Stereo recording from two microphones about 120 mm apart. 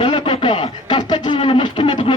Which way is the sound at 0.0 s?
40° left (ahead or behind).